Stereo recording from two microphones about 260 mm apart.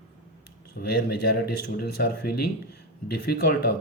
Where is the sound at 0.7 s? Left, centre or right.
Left.